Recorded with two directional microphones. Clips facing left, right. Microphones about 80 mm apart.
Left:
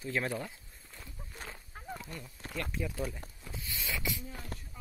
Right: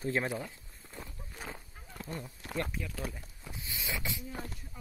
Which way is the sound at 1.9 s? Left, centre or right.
Right.